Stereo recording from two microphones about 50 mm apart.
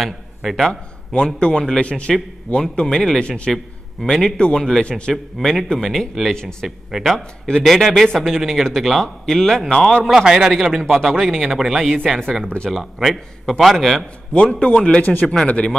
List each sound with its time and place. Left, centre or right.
0.0 s a man's voice: centre
0.6 s a man's voice: centre
10.1 s a man's voice: centre
13.0 s a man's voice: centre
14.3 s a man's voice: left
15.0 s a man's voice: left